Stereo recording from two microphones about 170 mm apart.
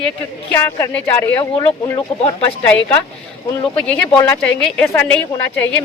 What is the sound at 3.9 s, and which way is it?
A woman's voice, 10° left (ahead or behind).